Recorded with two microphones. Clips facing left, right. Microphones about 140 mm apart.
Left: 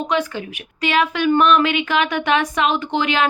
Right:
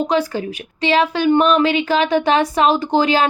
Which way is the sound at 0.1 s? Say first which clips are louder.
Right 3 dB; 35° right (ahead or behind).